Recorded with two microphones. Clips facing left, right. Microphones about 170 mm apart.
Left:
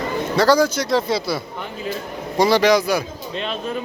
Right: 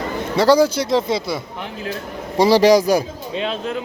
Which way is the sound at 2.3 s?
30° right (ahead or behind).